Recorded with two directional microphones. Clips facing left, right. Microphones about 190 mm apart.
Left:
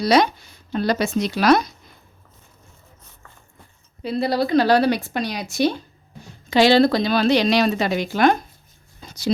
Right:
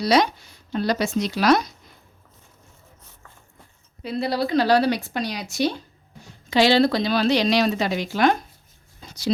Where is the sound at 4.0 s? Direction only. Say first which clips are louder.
Left 3 dB; 35° left (ahead or behind).